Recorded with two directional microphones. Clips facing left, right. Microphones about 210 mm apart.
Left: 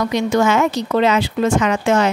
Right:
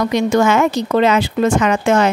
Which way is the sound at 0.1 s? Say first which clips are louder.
Right 2 dB; 50° right (ahead or behind).